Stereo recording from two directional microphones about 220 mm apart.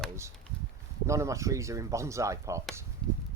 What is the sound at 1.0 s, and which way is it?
Speech, 15° right (ahead or behind).